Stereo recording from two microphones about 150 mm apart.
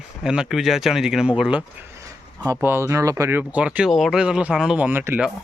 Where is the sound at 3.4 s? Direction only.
10° right (ahead or behind).